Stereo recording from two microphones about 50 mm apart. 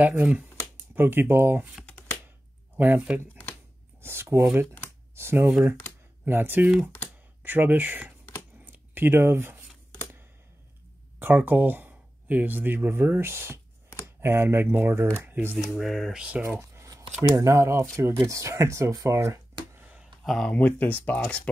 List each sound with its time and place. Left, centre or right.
0.0 s speech: right
0.9 s speech: right
2.8 s speech: right
4.0 s speech: right
6.2 s speech: right
8.6 s a sound: right
11.1 s speech: right
13.3 s speech: right
15.2 s speech: right
15.7 s speech: centre
16.2 s speech: right
16.4 s speech: right
17.9 s speech: right
20.6 s speech: left